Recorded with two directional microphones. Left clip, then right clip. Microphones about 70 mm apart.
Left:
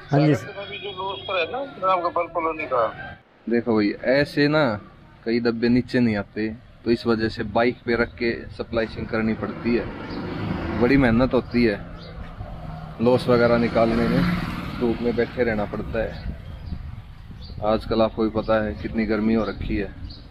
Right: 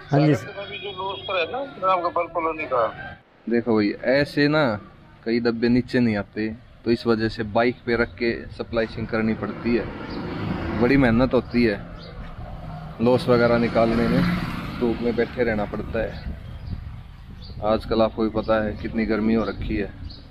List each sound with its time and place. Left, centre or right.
0.6 s music: centre
0.9 s a man's voice: centre
2.1 s speech: centre
3.4 s a man's voice: right
13.0 s speech: right
14.2 s wild animals: left
15.3 s speech: right
17.6 s a man's voice: right